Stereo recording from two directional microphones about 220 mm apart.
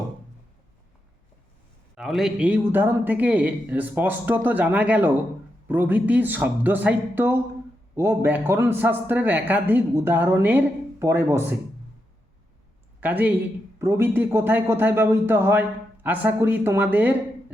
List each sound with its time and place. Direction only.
2.0 s a man's voice: centre (ahead or behind)
13.0 s a man's voice: 10° right (ahead or behind)